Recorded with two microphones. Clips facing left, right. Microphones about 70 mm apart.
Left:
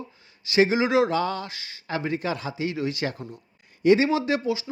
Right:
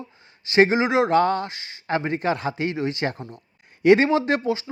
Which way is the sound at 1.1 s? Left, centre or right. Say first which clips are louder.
Right 7 dB; right.